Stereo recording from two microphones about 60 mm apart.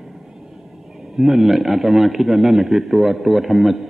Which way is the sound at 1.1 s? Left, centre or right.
Centre.